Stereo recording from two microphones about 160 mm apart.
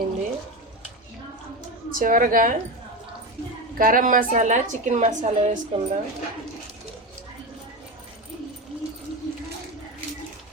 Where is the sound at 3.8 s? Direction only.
60° right (ahead or behind); by 5.8 s 45° right (ahead or behind).